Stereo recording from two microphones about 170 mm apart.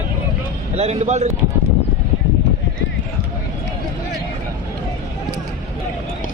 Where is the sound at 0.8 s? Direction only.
40° right (ahead or behind).